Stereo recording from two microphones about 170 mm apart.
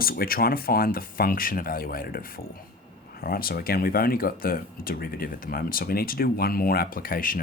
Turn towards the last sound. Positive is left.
turn(degrees=55)  # may be behind; listen again after turning